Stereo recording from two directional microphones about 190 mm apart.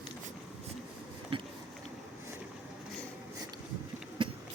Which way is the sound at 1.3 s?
25° right (ahead or behind).